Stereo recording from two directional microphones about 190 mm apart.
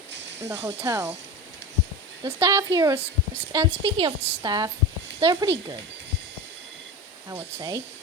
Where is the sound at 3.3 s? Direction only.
25° right (ahead or behind).